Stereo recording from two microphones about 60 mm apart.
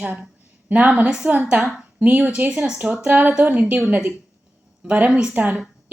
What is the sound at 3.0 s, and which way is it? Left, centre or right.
A woman's voice, right.